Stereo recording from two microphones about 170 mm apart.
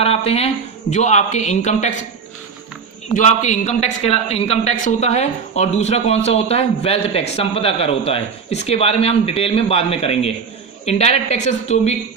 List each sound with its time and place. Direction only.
0.0 s speech: 35° left (ahead or behind)
3.2 s a man's voice: 45° left (ahead or behind)